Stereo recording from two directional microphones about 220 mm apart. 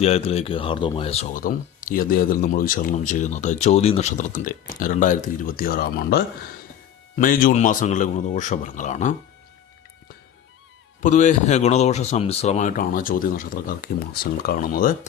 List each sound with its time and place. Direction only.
0.0 s speech: 30° left (ahead or behind)
11.0 s speech: 35° left (ahead or behind)